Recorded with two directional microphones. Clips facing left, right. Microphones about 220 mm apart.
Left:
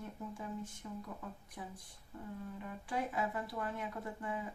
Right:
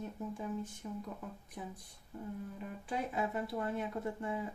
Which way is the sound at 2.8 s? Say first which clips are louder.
Right 1 dB; 25° right (ahead or behind).